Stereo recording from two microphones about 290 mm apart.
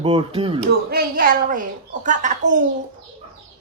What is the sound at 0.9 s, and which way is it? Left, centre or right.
Speech, right.